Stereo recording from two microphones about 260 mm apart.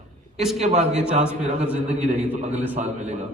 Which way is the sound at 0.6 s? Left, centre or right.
Right.